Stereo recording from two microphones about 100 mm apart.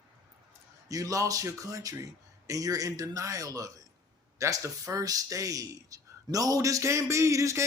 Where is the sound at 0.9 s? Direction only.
35° right (ahead or behind).